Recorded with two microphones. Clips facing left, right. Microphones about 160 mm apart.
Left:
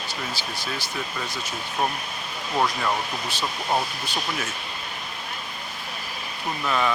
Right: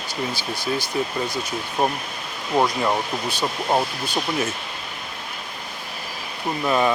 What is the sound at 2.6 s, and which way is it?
Speech, 15° right (ahead or behind).